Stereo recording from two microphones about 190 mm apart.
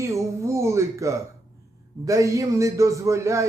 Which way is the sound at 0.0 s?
15° right (ahead or behind).